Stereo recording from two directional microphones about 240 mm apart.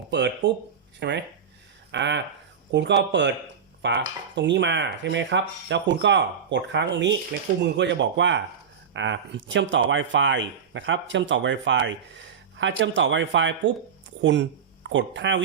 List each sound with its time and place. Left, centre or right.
0.1 s speech: right